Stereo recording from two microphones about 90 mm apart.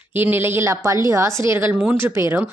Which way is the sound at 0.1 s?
20° right (ahead or behind).